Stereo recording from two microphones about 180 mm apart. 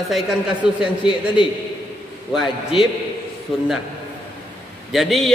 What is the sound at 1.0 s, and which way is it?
Speech, 30° left (ahead or behind).